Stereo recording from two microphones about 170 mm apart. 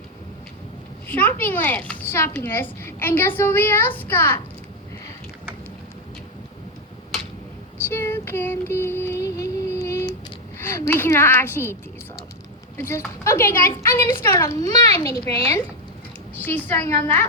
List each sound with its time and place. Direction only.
1.0 s a child's voice: 10° left (ahead or behind)
7.9 s music: 15° left (ahead or behind)
10.6 s a child's voice: 15° left (ahead or behind)
12.9 s a child's voice: 15° left (ahead or behind)